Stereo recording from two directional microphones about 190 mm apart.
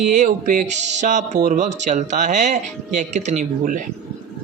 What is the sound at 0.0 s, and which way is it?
Speech, 40° right (ahead or behind).